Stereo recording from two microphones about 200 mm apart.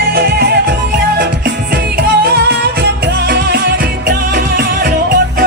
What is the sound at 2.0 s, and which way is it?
Music, 55° right (ahead or behind).